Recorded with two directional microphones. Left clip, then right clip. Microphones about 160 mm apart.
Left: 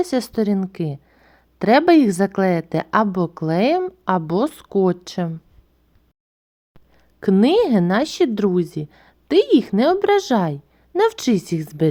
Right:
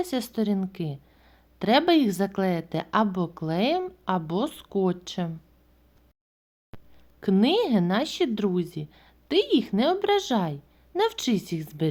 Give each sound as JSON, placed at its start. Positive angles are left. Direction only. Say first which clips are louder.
{"t": 0.0, "sound": "a woman's voice", "louder": "left 8 dB", "side_deg": 45}
{"t": 6.9, "sound": "a woman's voice", "louder": "left 7 dB", "side_deg": 50}